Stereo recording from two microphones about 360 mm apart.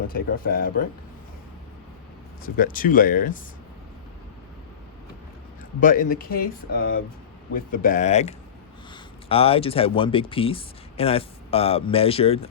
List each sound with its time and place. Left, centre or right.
0.1 s speech: left
2.4 s speech: left
5.8 s speech: left